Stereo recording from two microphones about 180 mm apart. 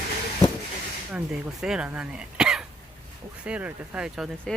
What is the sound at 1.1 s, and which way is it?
Speech, 5° right (ahead or behind).